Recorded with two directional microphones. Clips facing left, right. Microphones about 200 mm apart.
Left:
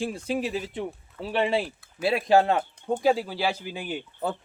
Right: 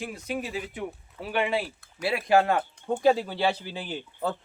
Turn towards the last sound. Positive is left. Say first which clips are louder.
# left 1 dB
turn(degrees=15)  # may be behind; listen again after turning